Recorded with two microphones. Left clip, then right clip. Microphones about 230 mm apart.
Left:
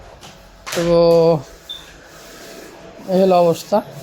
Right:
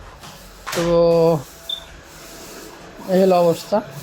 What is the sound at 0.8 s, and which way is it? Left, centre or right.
Speech, centre.